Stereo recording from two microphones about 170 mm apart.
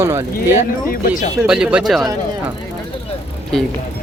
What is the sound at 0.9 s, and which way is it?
Speech, 55° left (ahead or behind).